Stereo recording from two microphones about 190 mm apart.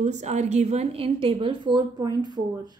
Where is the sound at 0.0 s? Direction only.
40° right (ahead or behind); by 2.8 s 20° right (ahead or behind).